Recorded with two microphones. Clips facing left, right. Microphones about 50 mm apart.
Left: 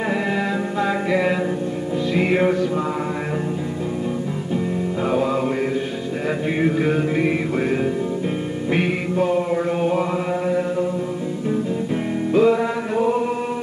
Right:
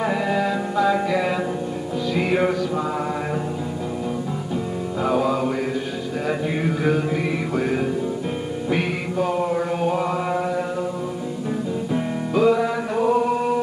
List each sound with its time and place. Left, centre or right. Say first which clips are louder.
0.0 s music: right 1 dB; centre
5.0 s music: right 1 dB; centre
6.8 s music: left 2 dB; left
12.4 s music: left 1 dB; centre